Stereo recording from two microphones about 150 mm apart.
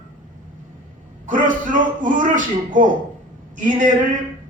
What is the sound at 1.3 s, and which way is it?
Music, 60° right (ahead or behind).